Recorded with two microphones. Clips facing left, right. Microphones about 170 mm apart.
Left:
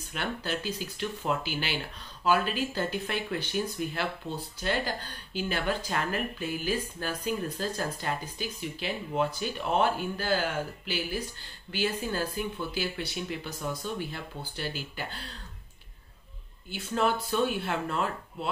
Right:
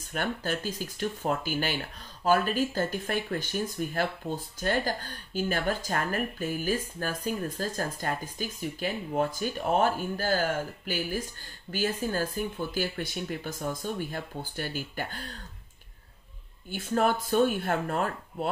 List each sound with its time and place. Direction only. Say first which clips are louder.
0.1 s speech: right 2 dB; 45° right (ahead or behind)
16.7 s speech: right 2 dB; 45° right (ahead or behind)